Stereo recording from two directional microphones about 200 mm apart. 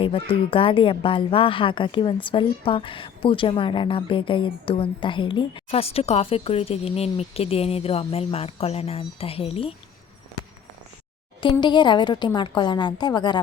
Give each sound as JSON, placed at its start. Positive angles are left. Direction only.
{"t": 0.0, "sound": "a woman's voice", "side_deg": 25}
{"t": 11.6, "sound": "a woman's voice", "side_deg": 20}